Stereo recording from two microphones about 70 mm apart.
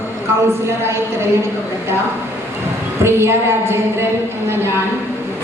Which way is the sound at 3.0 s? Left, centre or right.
Right.